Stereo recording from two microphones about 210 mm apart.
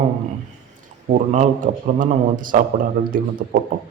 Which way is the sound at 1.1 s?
35° right (ahead or behind).